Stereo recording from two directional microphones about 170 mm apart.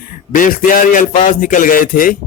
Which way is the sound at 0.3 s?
50° left (ahead or behind).